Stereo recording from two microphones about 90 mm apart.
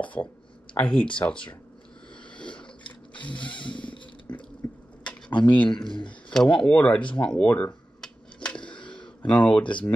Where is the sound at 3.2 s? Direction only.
15° left (ahead or behind).